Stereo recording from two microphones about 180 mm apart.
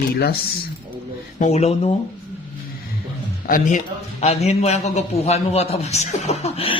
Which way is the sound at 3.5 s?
45° left (ahead or behind).